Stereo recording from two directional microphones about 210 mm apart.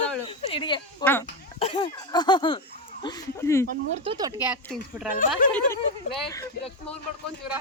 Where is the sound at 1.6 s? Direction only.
25° left (ahead or behind).